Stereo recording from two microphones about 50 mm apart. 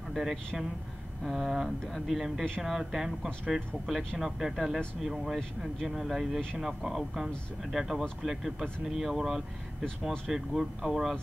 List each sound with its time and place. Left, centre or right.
0.1 s speech: centre